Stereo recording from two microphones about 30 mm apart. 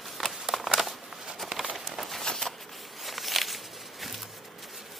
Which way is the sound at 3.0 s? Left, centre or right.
Centre.